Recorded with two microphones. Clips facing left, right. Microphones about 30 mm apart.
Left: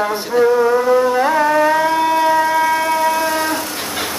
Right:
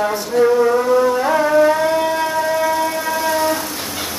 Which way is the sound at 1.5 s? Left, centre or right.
Left.